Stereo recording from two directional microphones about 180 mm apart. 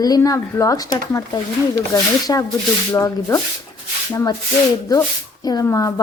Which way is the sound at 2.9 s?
15° left (ahead or behind).